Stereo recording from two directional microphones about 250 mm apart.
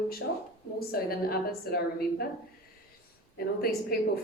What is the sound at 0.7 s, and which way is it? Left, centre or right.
A woman's voice, left.